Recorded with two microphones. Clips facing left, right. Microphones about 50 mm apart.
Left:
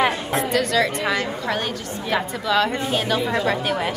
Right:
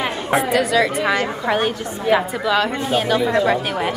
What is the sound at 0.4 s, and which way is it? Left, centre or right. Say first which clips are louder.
Speech: right 3 dB; centre.